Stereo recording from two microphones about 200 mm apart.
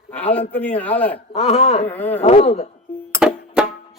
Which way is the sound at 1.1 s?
30° left (ahead or behind).